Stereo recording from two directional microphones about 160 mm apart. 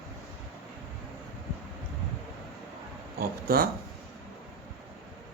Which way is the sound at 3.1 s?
70° right (ahead or behind).